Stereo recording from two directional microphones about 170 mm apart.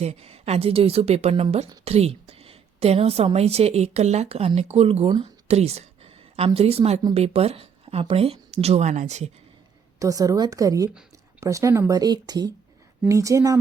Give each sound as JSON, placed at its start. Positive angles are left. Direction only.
{"t": 0.0, "sound": "a woman's voice", "side_deg": -40}
{"t": 10.0, "sound": "speech", "side_deg": -20}